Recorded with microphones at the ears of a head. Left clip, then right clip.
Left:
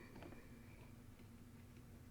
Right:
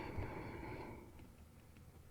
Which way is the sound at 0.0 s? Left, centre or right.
Right.